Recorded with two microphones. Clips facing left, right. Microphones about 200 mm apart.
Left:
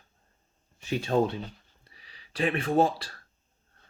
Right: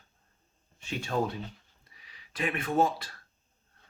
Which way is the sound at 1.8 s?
30° left (ahead or behind).